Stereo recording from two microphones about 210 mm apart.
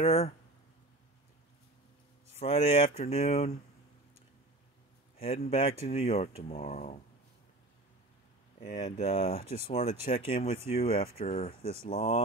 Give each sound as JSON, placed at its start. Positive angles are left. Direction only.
{"t": 0.0, "sound": "speech", "side_deg": 30}
{"t": 2.3, "sound": "speech", "side_deg": 30}
{"t": 5.2, "sound": "speech", "side_deg": 30}
{"t": 8.7, "sound": "speech", "side_deg": 30}